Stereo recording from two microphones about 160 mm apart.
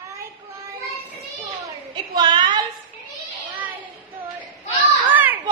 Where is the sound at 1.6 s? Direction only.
25° right (ahead or behind).